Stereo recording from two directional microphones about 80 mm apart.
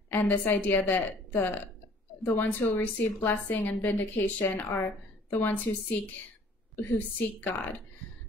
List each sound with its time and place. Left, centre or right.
0.1 s a woman's voice: left